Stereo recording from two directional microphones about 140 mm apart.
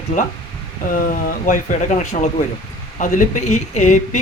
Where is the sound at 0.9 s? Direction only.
80° left.